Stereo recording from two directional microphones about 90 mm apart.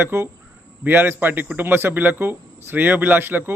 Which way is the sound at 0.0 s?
25° right (ahead or behind).